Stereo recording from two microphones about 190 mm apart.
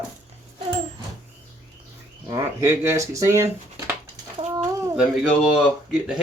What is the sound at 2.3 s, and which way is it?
Speech, 15° right (ahead or behind).